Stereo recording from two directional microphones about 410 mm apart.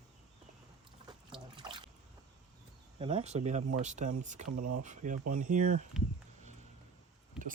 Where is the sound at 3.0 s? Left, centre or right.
Centre.